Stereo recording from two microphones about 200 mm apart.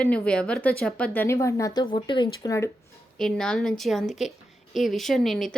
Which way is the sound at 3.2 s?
5° left (ahead or behind).